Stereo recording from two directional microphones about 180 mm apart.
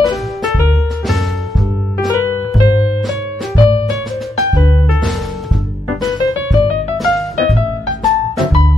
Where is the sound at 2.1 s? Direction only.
15° left (ahead or behind).